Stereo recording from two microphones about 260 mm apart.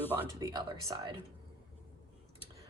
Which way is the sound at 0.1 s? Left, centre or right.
Centre.